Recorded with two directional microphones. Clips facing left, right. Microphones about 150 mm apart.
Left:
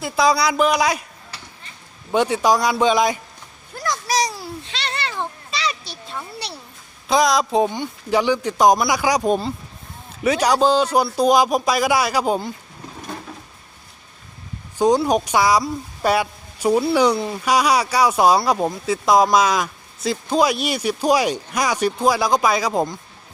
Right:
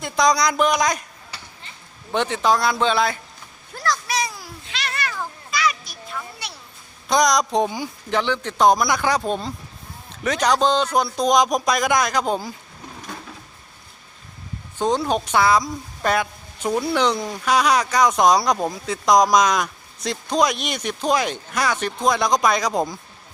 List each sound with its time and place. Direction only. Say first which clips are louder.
0.0 s speech: left 1 dB; 5° left (ahead or behind)
2.1 s speech: left 3 dB; 10° left (ahead or behind)
3.8 s a sound: right 1 dB; 20° left (ahead or behind)
4.0 s a sound: left 4 dB; 35° left (ahead or behind)
7.1 s speech: left 1 dB; 5° left (ahead or behind)
8.1 s speech: left 4 dB; 10° left (ahead or behind)
14.8 s speech: left 4 dB; 10° left (ahead or behind)